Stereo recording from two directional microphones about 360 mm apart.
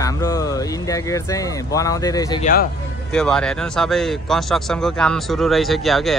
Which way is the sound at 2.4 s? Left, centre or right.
Left.